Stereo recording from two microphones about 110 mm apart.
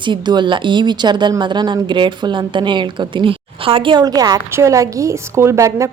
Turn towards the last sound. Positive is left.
turn(degrees=-25)  # may be behind; listen again after turning